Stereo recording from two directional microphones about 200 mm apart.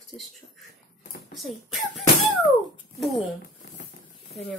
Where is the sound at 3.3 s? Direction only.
40° left (ahead or behind).